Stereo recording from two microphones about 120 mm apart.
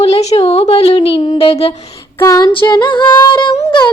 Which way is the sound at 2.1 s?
25° left (ahead or behind).